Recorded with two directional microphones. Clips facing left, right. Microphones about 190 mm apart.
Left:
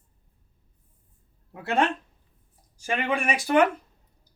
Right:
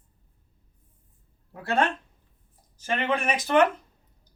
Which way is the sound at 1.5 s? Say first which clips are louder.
Left 1 dB; 15° left (ahead or behind).